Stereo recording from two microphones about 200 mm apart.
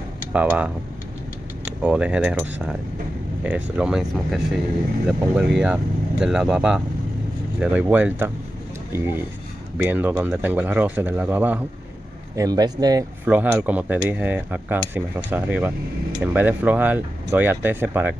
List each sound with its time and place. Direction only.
0.3 s speech: 5° right (ahead or behind)
13.2 s speech: 10° right (ahead or behind)